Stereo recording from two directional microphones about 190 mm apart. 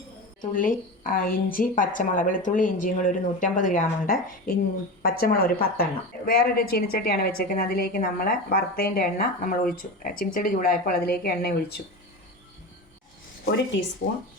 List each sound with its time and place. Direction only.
0.5 s a woman's voice: 45° left (ahead or behind)
14.0 s a woman's voice: 45° left (ahead or behind)